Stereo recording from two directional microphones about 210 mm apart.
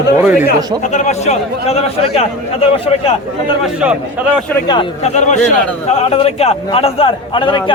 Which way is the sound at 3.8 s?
5° right (ahead or behind).